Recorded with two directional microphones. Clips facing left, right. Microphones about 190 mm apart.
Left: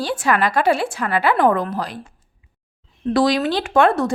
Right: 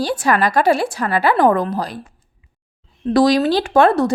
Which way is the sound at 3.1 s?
40° right (ahead or behind).